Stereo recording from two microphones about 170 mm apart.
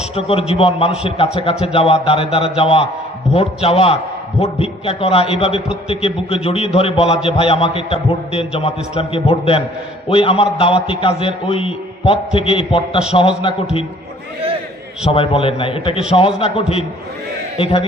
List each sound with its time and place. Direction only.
0.2 s a man's voice: 35° left (ahead or behind)
15.0 s a man's voice: 35° left (ahead or behind)